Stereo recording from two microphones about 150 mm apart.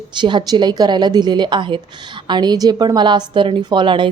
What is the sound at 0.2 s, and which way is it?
A woman's voice, 30° right (ahead or behind).